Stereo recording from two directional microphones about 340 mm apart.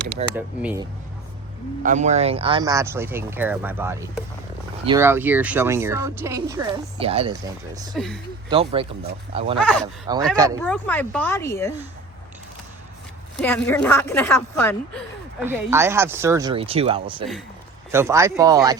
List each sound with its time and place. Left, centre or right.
0.3 s a woman's voice: centre
1.8 s speech: right
7.9 s a woman's voice: centre
8.4 s speech: centre
10.6 s a woman's voice: centre
13.4 s a woman's voice: centre
15.4 s speech: centre